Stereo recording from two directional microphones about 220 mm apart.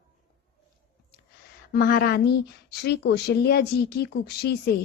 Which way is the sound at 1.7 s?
40° left (ahead or behind).